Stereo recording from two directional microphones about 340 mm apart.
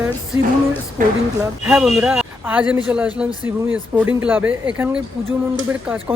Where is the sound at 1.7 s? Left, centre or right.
Centre.